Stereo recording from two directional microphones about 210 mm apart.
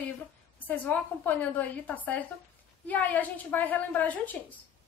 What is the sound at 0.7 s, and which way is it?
Speech, 10° left (ahead or behind).